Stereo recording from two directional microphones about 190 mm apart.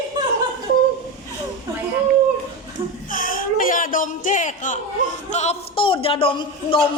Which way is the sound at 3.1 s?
45° left (ahead or behind).